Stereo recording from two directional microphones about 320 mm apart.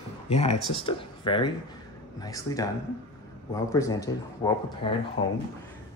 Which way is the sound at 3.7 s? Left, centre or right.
Centre.